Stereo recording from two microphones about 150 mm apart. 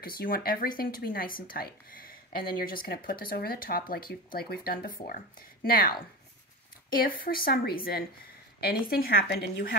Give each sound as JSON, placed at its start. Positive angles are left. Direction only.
{"t": 0.0, "sound": "speech", "side_deg": 80}
{"t": 7.2, "sound": "a woman's voice", "side_deg": 75}